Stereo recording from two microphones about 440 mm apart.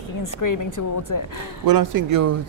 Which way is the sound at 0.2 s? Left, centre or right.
Left.